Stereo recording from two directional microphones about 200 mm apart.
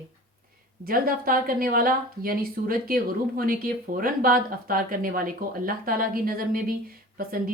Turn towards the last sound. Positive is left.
turn(degrees=-45)  # may be behind; listen again after turning